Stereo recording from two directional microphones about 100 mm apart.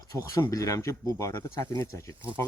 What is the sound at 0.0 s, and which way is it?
Speech, 35° left (ahead or behind).